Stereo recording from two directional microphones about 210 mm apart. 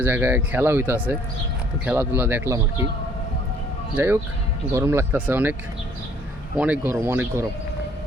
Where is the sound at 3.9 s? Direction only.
10° right (ahead or behind).